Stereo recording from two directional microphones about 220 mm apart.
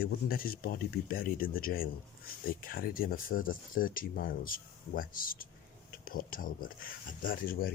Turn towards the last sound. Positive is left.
turn(degrees=40)  # may be behind; listen again after turning